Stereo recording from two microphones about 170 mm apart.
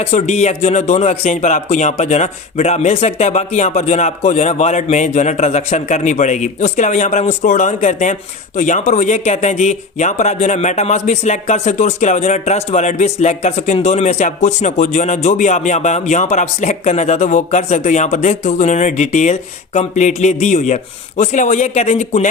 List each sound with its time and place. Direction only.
0.0 s speech: 40° left (ahead or behind)